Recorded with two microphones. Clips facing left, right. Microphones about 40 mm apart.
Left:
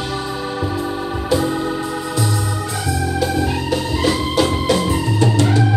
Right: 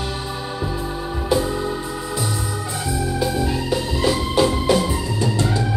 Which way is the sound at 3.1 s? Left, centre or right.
Left.